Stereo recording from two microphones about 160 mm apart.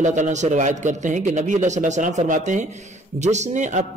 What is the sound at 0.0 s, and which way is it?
A man's voice, 50° right (ahead or behind).